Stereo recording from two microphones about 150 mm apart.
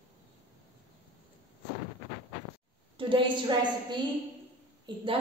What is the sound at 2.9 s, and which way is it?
A woman's voice, 30° right (ahead or behind).